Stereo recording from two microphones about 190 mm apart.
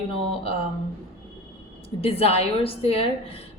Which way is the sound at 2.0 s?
30° left (ahead or behind).